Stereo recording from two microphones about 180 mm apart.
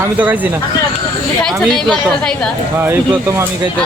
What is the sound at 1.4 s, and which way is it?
A woman's voice, 5° left (ahead or behind).